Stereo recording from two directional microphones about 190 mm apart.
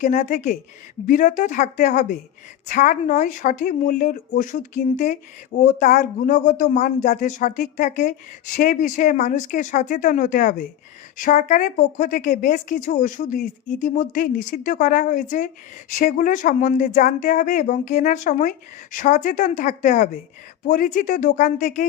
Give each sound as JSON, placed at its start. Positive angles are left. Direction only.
{"t": 0.0, "sound": "a woman's voice", "side_deg": 40}